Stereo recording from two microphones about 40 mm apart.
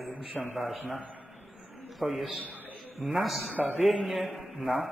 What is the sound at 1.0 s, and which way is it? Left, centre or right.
Speech, right.